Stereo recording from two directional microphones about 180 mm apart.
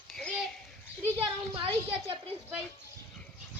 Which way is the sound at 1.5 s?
30° right (ahead or behind).